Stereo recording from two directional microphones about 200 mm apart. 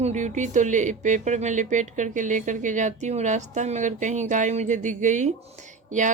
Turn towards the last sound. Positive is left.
turn(degrees=-40)  # may be behind; listen again after turning